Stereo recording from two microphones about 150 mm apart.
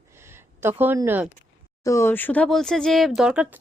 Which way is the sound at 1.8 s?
20° left (ahead or behind).